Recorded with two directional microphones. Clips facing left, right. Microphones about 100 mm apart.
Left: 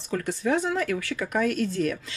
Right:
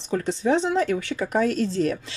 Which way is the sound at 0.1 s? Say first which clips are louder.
Right 3 dB; 25° right (ahead or behind).